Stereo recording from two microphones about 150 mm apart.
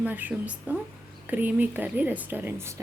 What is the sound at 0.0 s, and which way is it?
A woman's voice, 10° right (ahead or behind).